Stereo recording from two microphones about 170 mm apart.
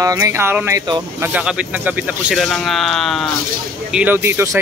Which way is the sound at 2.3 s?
Centre (ahead or behind).